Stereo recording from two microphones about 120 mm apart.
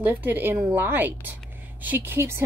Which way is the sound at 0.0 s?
15° right (ahead or behind).